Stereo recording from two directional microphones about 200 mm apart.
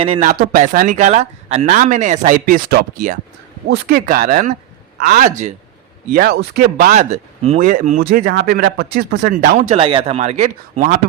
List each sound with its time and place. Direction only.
0.0 s speech: 30° right (ahead or behind)
0.3 s speech: 45° right (ahead or behind)
9.7 s speech: 25° right (ahead or behind)